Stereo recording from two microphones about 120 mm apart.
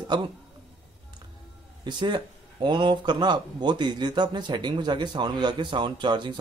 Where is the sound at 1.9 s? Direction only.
40° right (ahead or behind).